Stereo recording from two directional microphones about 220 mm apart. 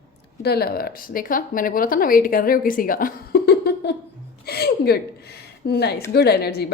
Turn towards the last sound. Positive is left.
turn(degrees=45)  # may be behind; listen again after turning